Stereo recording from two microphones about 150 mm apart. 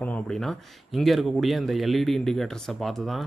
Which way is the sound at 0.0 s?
5° left (ahead or behind).